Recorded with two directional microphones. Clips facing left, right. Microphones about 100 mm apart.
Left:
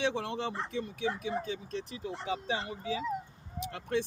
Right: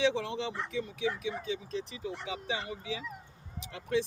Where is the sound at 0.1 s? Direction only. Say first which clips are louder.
Even; 50° left (ahead or behind).